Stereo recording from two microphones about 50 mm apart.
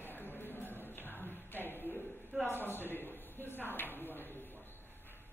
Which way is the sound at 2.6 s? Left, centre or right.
Left.